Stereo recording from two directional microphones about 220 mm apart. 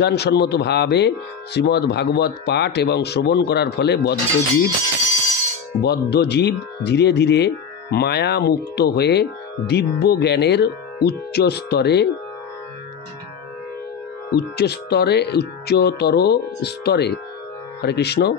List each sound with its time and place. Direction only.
0.0 s speech: 50° left (ahead or behind)
5.8 s speech: 45° left (ahead or behind)
14.3 s speech: 45° left (ahead or behind)